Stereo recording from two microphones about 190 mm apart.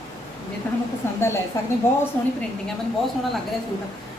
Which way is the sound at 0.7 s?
10° left (ahead or behind).